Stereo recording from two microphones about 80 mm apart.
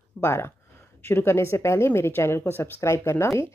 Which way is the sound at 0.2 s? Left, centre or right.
Left.